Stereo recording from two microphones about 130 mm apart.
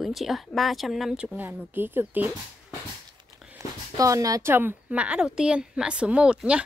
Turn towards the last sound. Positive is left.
turn(degrees=-10)  # may be behind; listen again after turning